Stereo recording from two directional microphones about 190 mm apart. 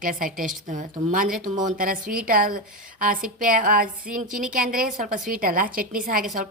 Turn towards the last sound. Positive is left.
turn(degrees=-45)  # may be behind; listen again after turning